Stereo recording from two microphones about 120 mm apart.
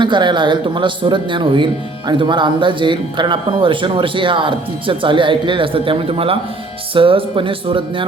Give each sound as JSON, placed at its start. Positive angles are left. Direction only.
{"t": 0.0, "sound": "speech", "side_deg": -40}